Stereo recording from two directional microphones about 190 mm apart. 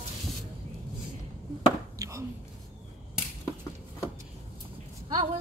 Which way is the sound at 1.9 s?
15° right (ahead or behind).